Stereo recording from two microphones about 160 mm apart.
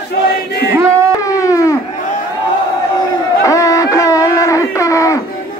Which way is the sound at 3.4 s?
20° left (ahead or behind).